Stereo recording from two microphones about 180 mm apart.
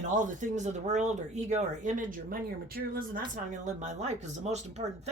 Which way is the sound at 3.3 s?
40° right (ahead or behind).